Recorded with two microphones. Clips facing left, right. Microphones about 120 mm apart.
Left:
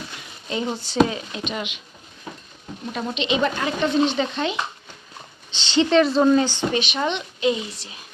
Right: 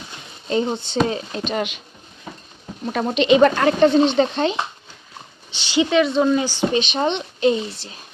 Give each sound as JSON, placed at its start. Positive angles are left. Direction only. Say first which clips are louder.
{"t": 0.1, "sound": "a sound", "louder": "right 9 dB", "side_deg": -30}
{"t": 1.0, "sound": "speech", "louder": "right 3 dB", "side_deg": -35}
{"t": 2.9, "sound": "speech", "louder": "right 8 dB", "side_deg": -55}
{"t": 3.8, "sound": "speech", "louder": "right 4 dB", "side_deg": -30}
{"t": 5.5, "sound": "speech", "louder": "even", "side_deg": -10}
{"t": 6.7, "sound": "speech", "louder": "right 4 dB", "side_deg": -30}